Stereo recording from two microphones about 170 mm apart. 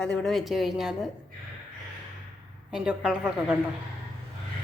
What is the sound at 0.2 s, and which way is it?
Speech, centre (ahead or behind).